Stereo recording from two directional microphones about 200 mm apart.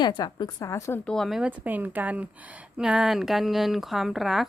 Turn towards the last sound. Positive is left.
turn(degrees=0)  # may be behind; listen again after turning